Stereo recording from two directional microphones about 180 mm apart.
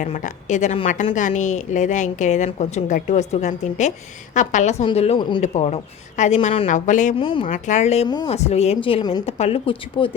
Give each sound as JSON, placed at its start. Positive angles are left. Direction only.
{"t": 0.0, "sound": "a woman's voice", "side_deg": 45}
{"t": 5.4, "sound": "a woman's voice", "side_deg": 40}
{"t": 7.2, "sound": "speech", "side_deg": 30}
{"t": 7.4, "sound": "a woman's voice", "side_deg": 45}
{"t": 8.0, "sound": "speech", "side_deg": 25}
{"t": 8.3, "sound": "a woman's voice", "side_deg": 35}